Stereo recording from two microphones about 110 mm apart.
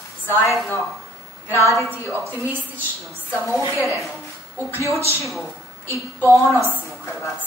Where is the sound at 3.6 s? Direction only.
25° right (ahead or behind).